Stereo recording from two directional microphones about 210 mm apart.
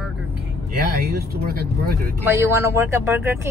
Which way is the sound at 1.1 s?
45° right (ahead or behind).